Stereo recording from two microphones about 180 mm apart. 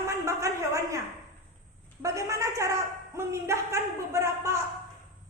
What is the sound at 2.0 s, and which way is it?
A man's voice, 15° right (ahead or behind).